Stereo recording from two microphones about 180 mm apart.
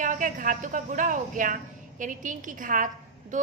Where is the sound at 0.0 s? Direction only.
45° right (ahead or behind).